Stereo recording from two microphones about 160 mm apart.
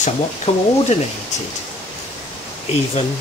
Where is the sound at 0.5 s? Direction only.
40° left (ahead or behind).